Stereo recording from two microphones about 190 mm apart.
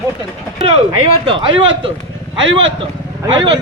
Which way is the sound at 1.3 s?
25° right (ahead or behind).